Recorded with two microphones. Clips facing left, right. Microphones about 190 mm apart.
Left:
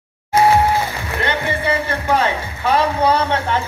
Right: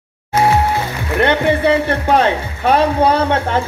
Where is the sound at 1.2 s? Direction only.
65° right (ahead or behind).